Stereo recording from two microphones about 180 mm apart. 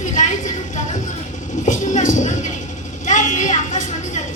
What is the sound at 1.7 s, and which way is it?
Music, 45° left (ahead or behind).